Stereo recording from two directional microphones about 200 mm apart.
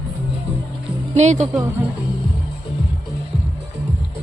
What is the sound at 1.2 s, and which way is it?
Speech, 35° right (ahead or behind).